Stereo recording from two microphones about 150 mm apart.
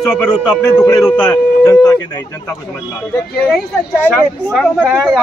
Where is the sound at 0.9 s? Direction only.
20° left (ahead or behind).